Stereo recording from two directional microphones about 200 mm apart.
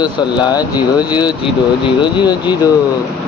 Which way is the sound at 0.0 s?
20° left (ahead or behind).